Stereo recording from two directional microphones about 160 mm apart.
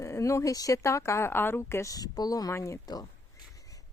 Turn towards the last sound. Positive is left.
turn(degrees=20)  # may be behind; listen again after turning